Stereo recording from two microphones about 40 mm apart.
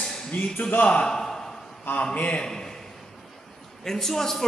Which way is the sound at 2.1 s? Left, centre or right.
Left.